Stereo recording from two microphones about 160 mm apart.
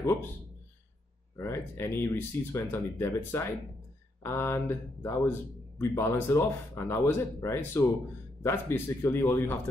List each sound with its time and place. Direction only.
1.3 s speech: 15° left (ahead or behind)